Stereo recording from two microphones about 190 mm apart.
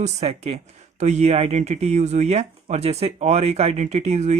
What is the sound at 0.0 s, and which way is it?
Speech, 35° right (ahead or behind).